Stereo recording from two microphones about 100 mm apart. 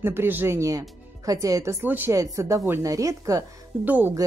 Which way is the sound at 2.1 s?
35° right (ahead or behind).